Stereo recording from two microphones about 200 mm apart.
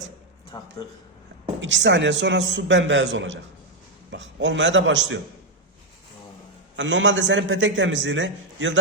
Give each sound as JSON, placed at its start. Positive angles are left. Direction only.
{"t": 0.5, "sound": "speech", "side_deg": 15}
{"t": 1.6, "sound": "a man's voice", "side_deg": -65}
{"t": 6.7, "sound": "a man's voice", "side_deg": -65}